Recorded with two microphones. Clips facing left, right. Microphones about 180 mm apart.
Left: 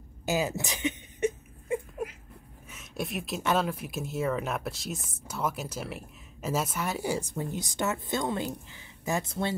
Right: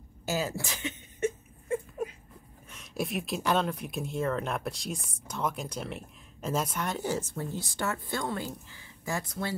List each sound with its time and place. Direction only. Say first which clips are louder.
0.2 s whimper: left 3 dB; 15° left (ahead or behind)
2.7 s speech: right 2 dB; centre (ahead or behind); by 9.6 s 25° left (ahead or behind)